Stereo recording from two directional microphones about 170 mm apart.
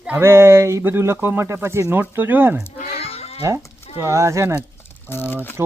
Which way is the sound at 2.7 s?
60° left (ahead or behind).